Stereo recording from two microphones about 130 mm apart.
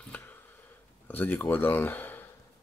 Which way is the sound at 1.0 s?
15° left (ahead or behind).